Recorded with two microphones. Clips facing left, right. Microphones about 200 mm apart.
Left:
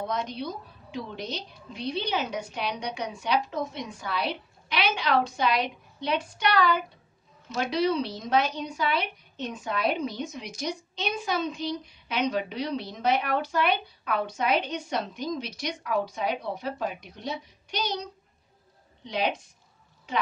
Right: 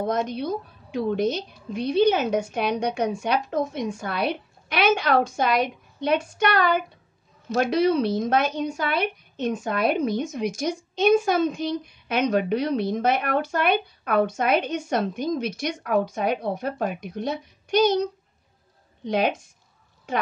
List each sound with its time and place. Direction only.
0.0 s a woman's voice: 50° right (ahead or behind)